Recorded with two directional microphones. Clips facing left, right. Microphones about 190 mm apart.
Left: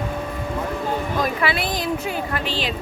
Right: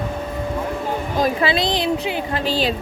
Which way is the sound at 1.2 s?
25° right (ahead or behind).